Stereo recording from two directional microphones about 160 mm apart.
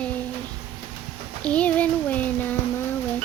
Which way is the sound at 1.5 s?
10° left (ahead or behind).